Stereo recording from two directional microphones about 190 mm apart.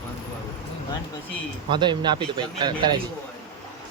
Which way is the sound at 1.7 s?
25° right (ahead or behind).